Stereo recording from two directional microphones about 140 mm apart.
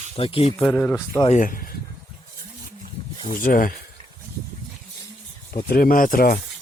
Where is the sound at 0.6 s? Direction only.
10° left (ahead or behind).